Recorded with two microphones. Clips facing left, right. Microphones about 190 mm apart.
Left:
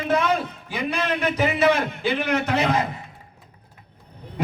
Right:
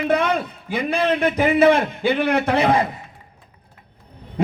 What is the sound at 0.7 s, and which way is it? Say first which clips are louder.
A man's voice: right 6 dB; 55° right (ahead or behind).